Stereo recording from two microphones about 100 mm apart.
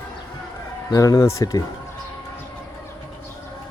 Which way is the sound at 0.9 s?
40° left (ahead or behind).